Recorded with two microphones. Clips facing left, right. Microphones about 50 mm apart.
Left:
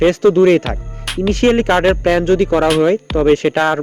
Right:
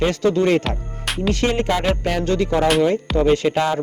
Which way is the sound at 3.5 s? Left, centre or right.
Left.